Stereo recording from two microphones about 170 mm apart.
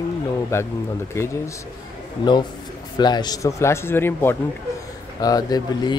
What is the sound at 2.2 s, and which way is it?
Speech, 25° left (ahead or behind).